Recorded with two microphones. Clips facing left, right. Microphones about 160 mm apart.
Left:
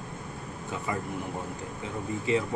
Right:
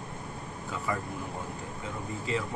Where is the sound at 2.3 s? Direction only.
20° left (ahead or behind).